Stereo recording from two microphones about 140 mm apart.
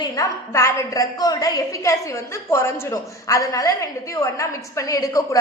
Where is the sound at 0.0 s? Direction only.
25° left (ahead or behind).